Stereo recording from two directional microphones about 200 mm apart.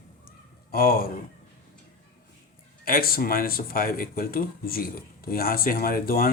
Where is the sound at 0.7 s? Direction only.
50° left (ahead or behind).